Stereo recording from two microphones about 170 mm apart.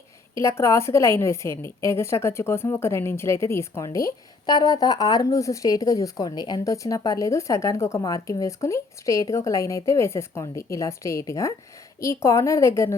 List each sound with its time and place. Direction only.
0.3 s a woman's voice: 15° left (ahead or behind)